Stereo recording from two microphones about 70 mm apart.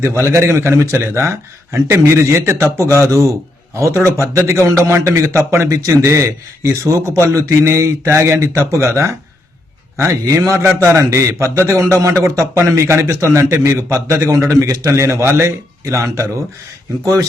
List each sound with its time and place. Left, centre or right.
0.0 s a man's voice: right
10.2 s a man's voice: right